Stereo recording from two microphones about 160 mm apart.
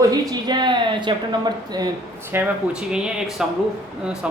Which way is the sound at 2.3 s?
15° right (ahead or behind).